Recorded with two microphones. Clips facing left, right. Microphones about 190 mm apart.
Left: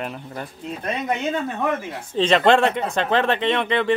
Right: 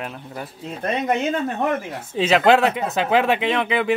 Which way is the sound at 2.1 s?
5° right (ahead or behind).